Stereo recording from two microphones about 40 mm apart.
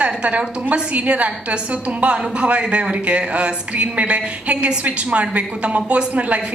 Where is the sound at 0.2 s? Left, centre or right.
Right.